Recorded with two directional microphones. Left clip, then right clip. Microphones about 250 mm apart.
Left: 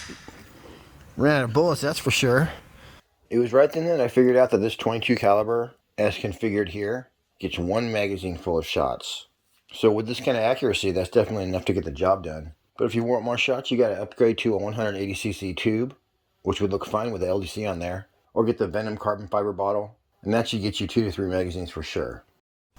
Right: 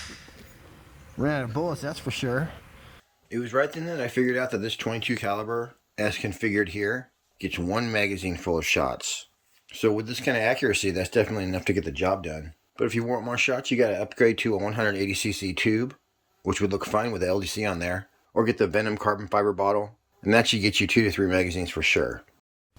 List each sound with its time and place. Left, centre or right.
0.3 s a sound: left
1.2 s speech: left
3.2 s speech: centre